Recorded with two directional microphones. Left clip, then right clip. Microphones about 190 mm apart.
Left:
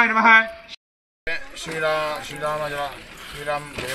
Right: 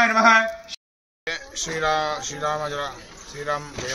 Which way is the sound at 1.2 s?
25° right (ahead or behind).